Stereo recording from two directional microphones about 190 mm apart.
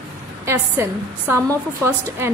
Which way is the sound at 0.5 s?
15° right (ahead or behind).